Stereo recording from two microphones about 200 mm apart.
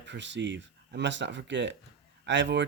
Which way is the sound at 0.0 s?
65° right (ahead or behind).